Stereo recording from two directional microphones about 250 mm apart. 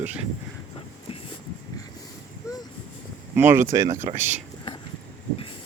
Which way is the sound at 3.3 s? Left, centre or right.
Centre.